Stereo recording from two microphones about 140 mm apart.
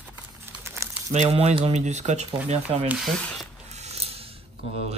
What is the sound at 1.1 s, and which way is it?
Speech, 50° right (ahead or behind).